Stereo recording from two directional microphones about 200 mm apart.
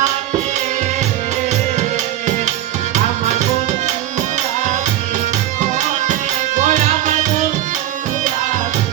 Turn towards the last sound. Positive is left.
turn(degrees=-40)  # may be behind; listen again after turning